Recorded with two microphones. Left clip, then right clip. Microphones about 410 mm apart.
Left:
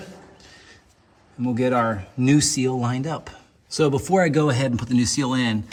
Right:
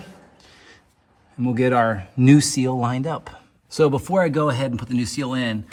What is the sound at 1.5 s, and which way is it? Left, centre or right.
Speech, centre.